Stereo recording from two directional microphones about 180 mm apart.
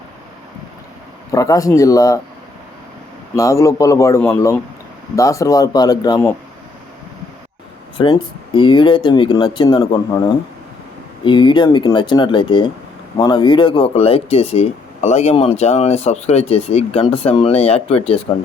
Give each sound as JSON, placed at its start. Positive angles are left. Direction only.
{"t": 1.3, "sound": "speech", "side_deg": 20}
{"t": 3.3, "sound": "speech", "side_deg": 15}
{"t": 7.9, "sound": "speech", "side_deg": 25}